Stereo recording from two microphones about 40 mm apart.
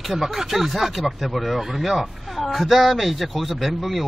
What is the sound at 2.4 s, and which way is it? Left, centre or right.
Speech, centre.